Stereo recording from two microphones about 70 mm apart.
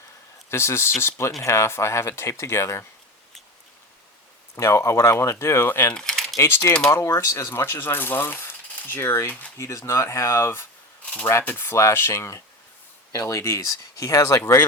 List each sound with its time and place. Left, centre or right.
0.5 s speech: left
4.5 s speech: left
5.9 s typewriter: centre
6.4 s speech: left
7.4 s speech: left
7.9 s coin: left
9.6 s speech: left